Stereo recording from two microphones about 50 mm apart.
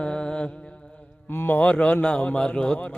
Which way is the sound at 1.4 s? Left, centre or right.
Left.